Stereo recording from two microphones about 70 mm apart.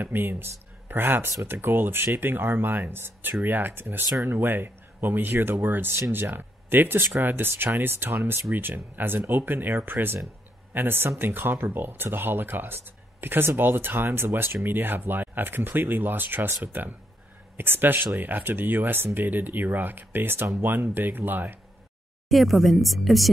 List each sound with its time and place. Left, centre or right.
0.0 s speech: right
22.3 s speech: centre